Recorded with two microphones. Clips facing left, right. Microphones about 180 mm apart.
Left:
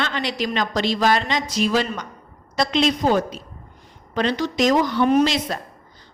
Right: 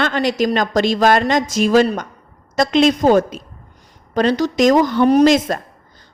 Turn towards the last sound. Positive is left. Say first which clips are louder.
# right 6 dB
turn(degrees=-50)  # may be behind; listen again after turning